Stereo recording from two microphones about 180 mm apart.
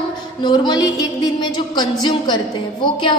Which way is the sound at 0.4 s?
25° left (ahead or behind).